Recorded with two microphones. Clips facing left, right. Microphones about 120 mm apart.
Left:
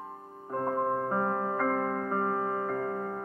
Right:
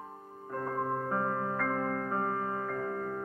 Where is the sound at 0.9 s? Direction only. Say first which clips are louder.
Left 3 dB; 15° left (ahead or behind).